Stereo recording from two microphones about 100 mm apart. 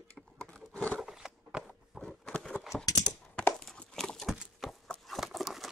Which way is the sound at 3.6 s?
5° left (ahead or behind).